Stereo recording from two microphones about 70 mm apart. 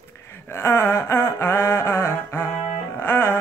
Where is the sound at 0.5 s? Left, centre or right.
Left.